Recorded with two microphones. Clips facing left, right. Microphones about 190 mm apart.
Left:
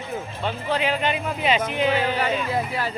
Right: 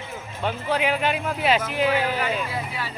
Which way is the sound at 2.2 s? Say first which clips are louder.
Left 3 dB; 45° left (ahead or behind).